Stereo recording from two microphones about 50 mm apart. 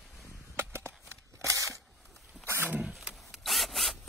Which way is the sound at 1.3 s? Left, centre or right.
Right.